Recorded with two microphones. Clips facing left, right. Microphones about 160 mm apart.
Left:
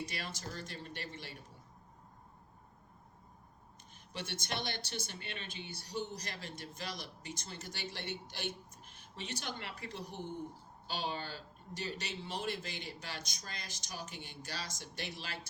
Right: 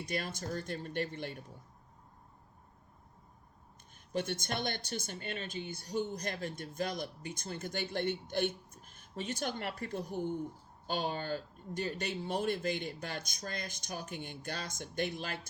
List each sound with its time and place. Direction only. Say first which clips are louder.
0.0 s speech: right 5 dB; 50° right (ahead or behind)
4.1 s speech: right 6 dB; 50° right (ahead or behind)